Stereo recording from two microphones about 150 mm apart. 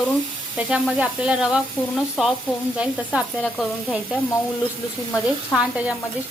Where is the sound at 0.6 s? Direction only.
5° right (ahead or behind).